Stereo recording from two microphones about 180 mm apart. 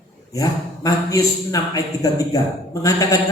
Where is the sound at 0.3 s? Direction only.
20° left (ahead or behind).